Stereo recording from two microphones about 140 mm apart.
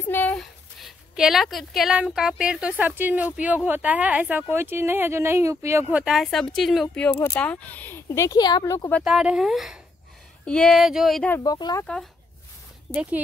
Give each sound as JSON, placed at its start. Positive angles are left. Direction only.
{"t": 0.0, "sound": "a sound", "side_deg": 15}
{"t": 0.4, "sound": "a woman's voice", "side_deg": 0}
{"t": 5.9, "sound": "speech", "side_deg": -5}
{"t": 7.1, "sound": "speech", "side_deg": 15}
{"t": 9.0, "sound": "speech", "side_deg": -5}
{"t": 11.4, "sound": "speech", "side_deg": 30}
{"t": 11.8, "sound": "speech", "side_deg": 5}
{"t": 12.9, "sound": "speech", "side_deg": -10}